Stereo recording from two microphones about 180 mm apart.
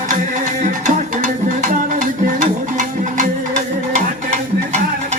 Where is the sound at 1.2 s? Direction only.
45° right (ahead or behind).